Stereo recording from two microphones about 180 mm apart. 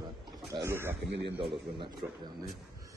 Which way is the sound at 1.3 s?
Centre (ahead or behind).